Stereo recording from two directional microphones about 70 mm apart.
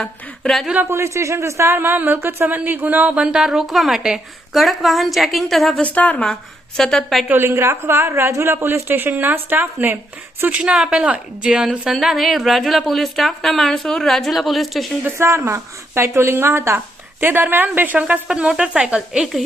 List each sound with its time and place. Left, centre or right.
0.0 s speech: centre
0.9 s a woman's voice: right
3.2 s a woman's voice: centre
5.8 s a woman's voice: centre
6.7 s a woman's voice: centre
7.3 s a woman's voice: right
10.4 s a woman's voice: centre
15.4 s a woman's voice: right
18.1 s a woman's voice: centre